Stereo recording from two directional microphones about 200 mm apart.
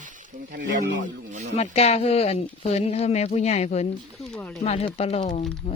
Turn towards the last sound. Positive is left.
turn(degrees=35)  # may be behind; listen again after turning